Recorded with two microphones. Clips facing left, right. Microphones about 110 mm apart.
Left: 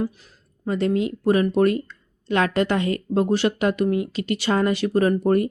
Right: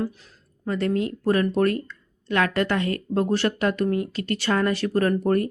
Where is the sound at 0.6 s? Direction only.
20° left (ahead or behind).